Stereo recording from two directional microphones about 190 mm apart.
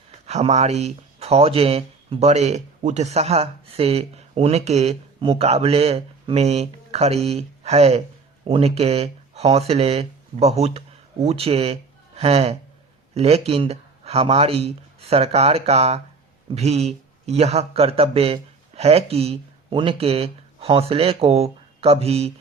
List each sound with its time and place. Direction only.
0.3 s speech: 35° right (ahead or behind)